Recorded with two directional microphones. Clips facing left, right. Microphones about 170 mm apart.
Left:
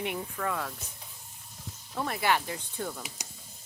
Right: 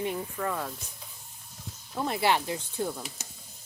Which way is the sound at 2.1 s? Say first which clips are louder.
Right 2 dB; 25° right (ahead or behind).